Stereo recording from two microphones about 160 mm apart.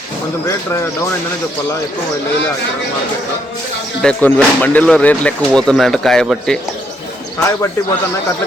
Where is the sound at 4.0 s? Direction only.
5° left (ahead or behind).